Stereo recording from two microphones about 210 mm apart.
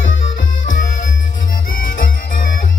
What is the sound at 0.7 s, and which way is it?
Music, 40° left (ahead or behind).